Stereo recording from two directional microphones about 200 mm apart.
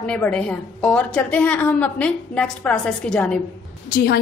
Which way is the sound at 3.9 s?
50° left (ahead or behind).